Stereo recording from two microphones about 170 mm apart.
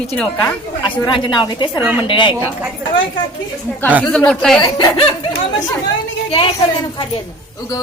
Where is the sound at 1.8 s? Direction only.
10° right (ahead or behind).